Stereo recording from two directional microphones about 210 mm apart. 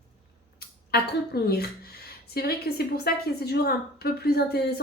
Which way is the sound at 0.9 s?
50° left (ahead or behind).